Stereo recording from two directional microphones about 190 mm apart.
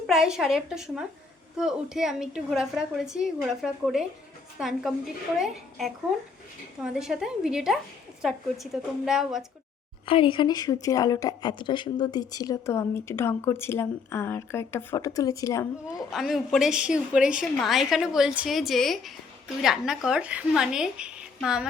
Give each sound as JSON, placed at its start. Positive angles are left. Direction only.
{"t": 0.1, "sound": "a woman's voice", "side_deg": -5}
{"t": 10.1, "sound": "a woman's voice", "side_deg": 25}
{"t": 16.1, "sound": "a woman's voice", "side_deg": 0}